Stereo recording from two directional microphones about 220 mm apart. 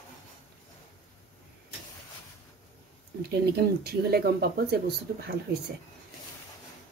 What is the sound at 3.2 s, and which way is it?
Speech, 45° right (ahead or behind).